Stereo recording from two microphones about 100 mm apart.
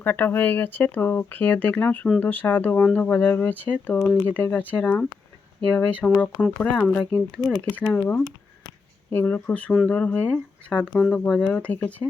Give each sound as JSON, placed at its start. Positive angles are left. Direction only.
{"t": 0.0, "sound": "speech", "side_deg": 20}
{"t": 9.0, "sound": "speech", "side_deg": 20}